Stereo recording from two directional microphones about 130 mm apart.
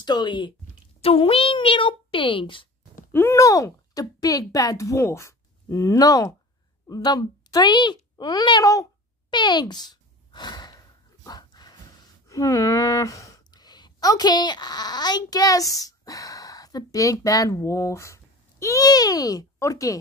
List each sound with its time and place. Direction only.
0.0 s speech: 35° left (ahead or behind)
1.0 s speech: 45° left (ahead or behind)
3.1 s a woman's voice: 20° left (ahead or behind)
9.3 s sigh: 35° left (ahead or behind)
11.2 s dog: 30° left (ahead or behind)
12.3 s speech: 25° left (ahead or behind)